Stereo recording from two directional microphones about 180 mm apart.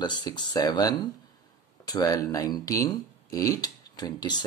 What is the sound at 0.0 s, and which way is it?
Speech, 25° left (ahead or behind).